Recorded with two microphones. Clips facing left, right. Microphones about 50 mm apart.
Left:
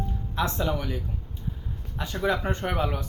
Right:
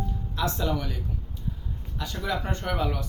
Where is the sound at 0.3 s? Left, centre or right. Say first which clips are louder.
Left 1 dB; left.